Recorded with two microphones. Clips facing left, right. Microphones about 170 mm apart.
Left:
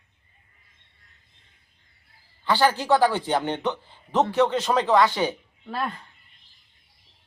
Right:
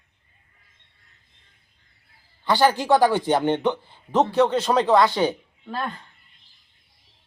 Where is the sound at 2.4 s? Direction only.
15° right (ahead or behind).